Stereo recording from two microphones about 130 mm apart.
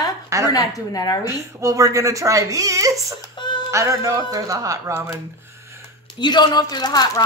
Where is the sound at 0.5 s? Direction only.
25° left (ahead or behind).